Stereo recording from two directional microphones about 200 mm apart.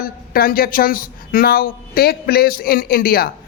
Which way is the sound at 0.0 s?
45° left (ahead or behind).